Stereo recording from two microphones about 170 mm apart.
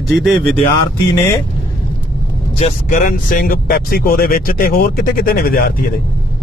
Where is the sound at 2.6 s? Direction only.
50° left (ahead or behind).